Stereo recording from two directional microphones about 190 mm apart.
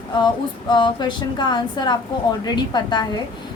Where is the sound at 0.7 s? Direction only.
25° left (ahead or behind).